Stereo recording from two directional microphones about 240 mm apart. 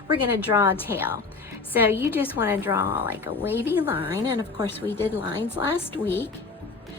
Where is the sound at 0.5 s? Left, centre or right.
Centre.